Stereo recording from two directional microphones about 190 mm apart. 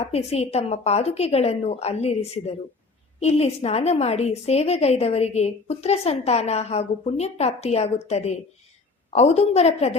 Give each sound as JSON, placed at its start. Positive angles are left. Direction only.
{"t": 0.0, "sound": "a woman's voice", "side_deg": 35}